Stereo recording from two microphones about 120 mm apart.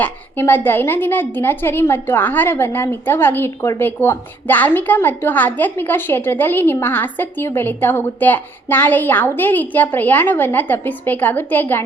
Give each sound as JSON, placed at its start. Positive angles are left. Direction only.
{"t": 0.0, "sound": "a woman's voice", "side_deg": 20}